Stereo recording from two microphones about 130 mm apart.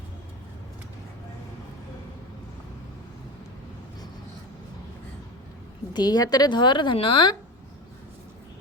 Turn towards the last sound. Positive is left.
turn(degrees=40)  # may be behind; listen again after turning